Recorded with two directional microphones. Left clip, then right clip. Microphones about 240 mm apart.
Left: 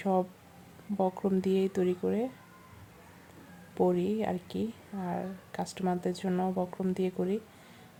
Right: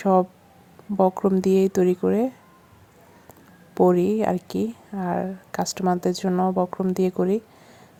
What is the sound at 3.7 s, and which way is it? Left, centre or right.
Speech, right.